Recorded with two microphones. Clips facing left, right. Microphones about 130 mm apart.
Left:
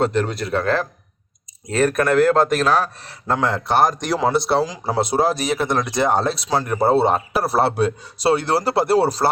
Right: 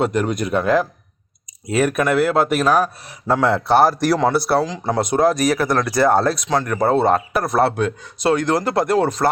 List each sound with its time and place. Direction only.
0.0 s speech: 10° right (ahead or behind)
3.7 s speech: 15° left (ahead or behind)
3.9 s speech: 5° right (ahead or behind)
4.6 s speech: 10° left (ahead or behind)
4.9 s speech: 30° left (ahead or behind)